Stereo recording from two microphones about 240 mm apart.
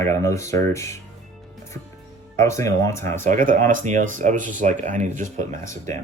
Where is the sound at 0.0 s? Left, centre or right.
Centre.